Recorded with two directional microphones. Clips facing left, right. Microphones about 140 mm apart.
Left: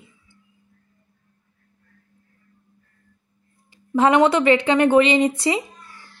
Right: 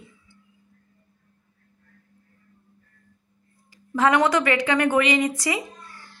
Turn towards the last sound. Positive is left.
turn(degrees=25)  # may be behind; listen again after turning